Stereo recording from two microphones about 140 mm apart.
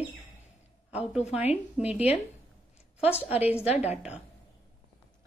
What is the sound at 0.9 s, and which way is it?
A woman's voice, 10° right (ahead or behind).